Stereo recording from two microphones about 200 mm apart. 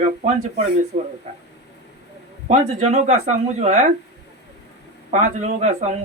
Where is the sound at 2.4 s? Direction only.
35° right (ahead or behind).